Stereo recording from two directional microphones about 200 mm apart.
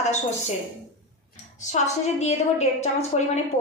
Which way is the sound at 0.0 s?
35° left (ahead or behind).